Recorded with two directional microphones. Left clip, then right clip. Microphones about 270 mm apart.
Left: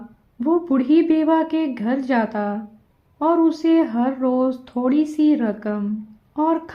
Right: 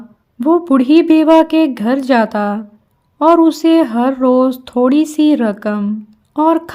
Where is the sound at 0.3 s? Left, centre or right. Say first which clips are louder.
Right 8 dB; right.